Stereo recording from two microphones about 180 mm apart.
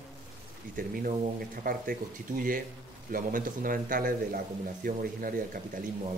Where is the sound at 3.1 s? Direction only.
50° right (ahead or behind).